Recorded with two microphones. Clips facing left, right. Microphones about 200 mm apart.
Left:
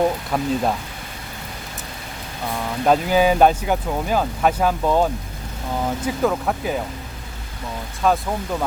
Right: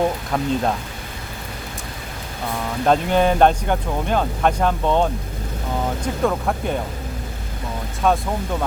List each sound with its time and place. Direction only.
0.3 s speech: 5° left (ahead or behind)
2.8 s speech: 5° left (ahead or behind)
6.1 s speech: 5° left (ahead or behind)
8.0 s speech: centre (ahead or behind)